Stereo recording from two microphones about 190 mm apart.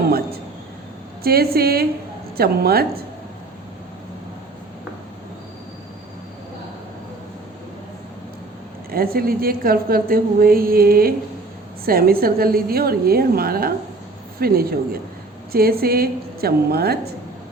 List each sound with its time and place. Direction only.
1.2 s a woman's voice: 55° right (ahead or behind)
8.9 s a woman's voice: 50° right (ahead or behind)